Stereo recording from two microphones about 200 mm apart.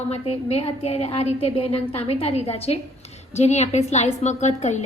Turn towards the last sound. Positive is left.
turn(degrees=35)  # may be behind; listen again after turning